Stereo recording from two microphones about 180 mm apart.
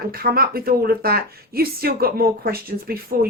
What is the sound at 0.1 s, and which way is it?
Speech, 55° right (ahead or behind).